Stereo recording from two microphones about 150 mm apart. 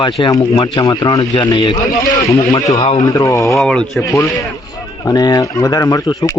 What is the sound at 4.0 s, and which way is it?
Speech, 20° left (ahead or behind).